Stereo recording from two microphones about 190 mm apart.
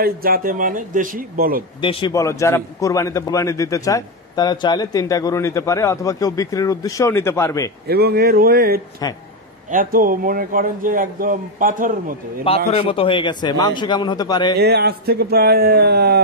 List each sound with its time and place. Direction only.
0.0 s a man's voice: 50° right (ahead or behind)
1.8 s a man's voice: 25° left (ahead or behind)
2.1 s a man's voice: 15° left (ahead or behind)
7.9 s a man's voice: 55° right (ahead or behind)
12.7 s a man's voice: 30° left (ahead or behind)
14.6 s speech: 55° right (ahead or behind)